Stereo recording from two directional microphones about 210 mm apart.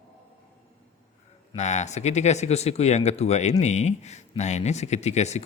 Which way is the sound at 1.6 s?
35° left (ahead or behind).